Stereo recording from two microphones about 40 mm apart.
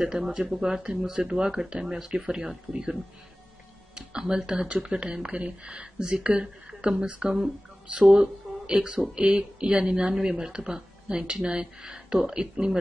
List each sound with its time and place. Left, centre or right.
0.2 s speech: centre
3.9 s music: centre
4.5 s speech: right
7.9 s speech: right